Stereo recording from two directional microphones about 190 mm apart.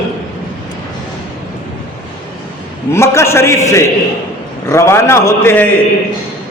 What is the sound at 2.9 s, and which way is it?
A man's voice, 15° left (ahead or behind).